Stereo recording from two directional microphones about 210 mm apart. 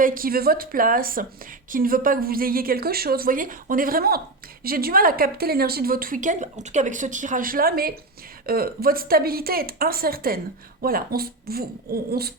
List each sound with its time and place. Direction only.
0.0 s a woman's voice: 40° right (ahead or behind)